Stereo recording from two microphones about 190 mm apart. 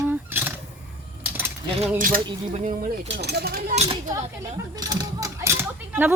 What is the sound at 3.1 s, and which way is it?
Speech, 60° right (ahead or behind).